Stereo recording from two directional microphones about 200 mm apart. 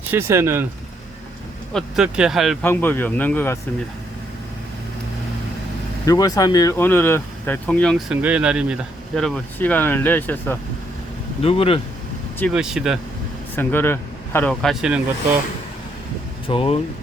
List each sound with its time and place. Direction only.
0.0 s speech: 10° right (ahead or behind)
1.7 s speech: 5° right (ahead or behind)
2.6 s speech: 10° left (ahead or behind)
6.1 s speech: 20° left (ahead or behind)
11.4 s speech: 30° left (ahead or behind)
12.5 s speech: 5° right (ahead or behind)
13.6 s speech: 10° left (ahead or behind)
16.5 s speech: 30° left (ahead or behind)